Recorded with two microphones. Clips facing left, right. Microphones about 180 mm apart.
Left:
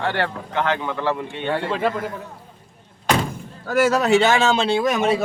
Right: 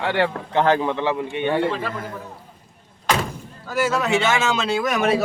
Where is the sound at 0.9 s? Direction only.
15° right (ahead or behind).